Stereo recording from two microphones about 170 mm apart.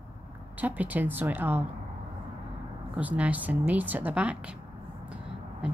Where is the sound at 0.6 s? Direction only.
10° right (ahead or behind).